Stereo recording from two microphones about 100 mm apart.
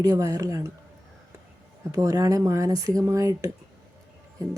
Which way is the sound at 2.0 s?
35° right (ahead or behind).